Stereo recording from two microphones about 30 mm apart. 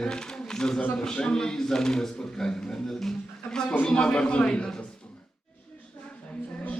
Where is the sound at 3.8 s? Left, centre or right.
Left.